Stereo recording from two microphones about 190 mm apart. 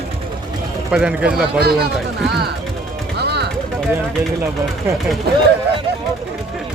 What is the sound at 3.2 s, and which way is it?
Music, 60° right (ahead or behind).